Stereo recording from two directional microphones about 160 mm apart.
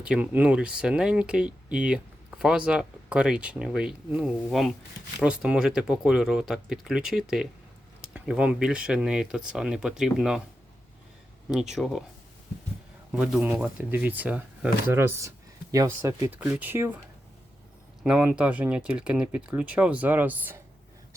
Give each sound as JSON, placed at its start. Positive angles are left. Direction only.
{"t": 0.0, "sound": "speech", "side_deg": -10}
{"t": 11.7, "sound": "speech", "side_deg": 0}
{"t": 13.1, "sound": "a man's voice", "side_deg": -5}
{"t": 18.0, "sound": "speech", "side_deg": -5}